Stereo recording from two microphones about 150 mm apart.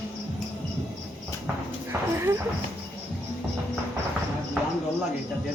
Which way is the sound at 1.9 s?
20° right (ahead or behind).